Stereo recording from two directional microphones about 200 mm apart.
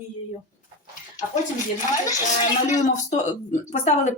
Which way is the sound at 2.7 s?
35° left (ahead or behind).